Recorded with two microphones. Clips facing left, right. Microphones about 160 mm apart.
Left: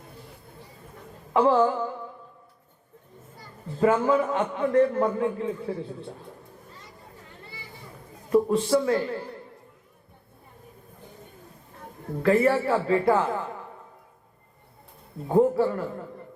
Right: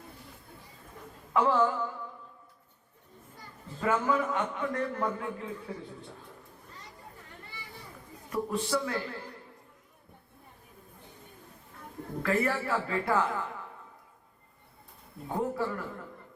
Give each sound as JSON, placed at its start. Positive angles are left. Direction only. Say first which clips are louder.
{"t": 1.3, "sound": "a man's voice", "louder": "left 6 dB", "side_deg": 30}
{"t": 3.8, "sound": "a man's voice", "louder": "left 7 dB", "side_deg": 35}
{"t": 8.3, "sound": "a man's voice", "louder": "left 10 dB", "side_deg": 35}
{"t": 12.2, "sound": "a man's voice", "louder": "left 9 dB", "side_deg": 30}
{"t": 15.3, "sound": "a man's voice", "louder": "left 11 dB", "side_deg": 30}